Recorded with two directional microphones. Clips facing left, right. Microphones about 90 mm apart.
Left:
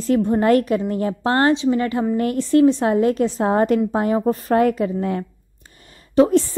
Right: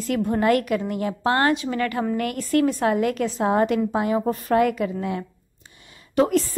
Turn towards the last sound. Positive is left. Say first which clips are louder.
# left 5 dB
turn(degrees=30)  # may be behind; listen again after turning